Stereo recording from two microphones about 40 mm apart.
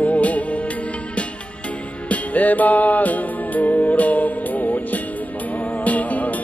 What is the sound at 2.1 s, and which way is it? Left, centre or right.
Music, left.